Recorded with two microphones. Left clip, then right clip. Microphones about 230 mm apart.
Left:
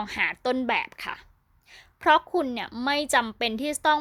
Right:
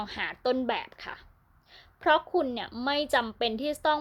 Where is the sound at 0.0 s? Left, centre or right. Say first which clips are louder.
Left 4 dB; left.